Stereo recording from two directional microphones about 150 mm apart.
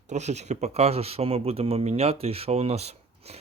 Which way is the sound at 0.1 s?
50° right (ahead or behind).